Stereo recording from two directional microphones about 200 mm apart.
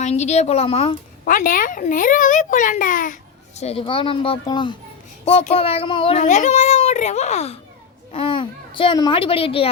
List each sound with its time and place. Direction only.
0.0 s a child's voice: 35° left (ahead or behind)
1.2 s a child's voice: 45° left (ahead or behind)
3.6 s a child's voice: 30° left (ahead or behind)